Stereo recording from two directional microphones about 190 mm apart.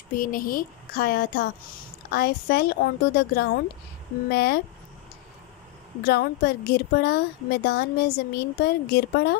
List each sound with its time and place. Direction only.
0.1 s speech: 45° left (ahead or behind)
6.0 s speech: 55° left (ahead or behind)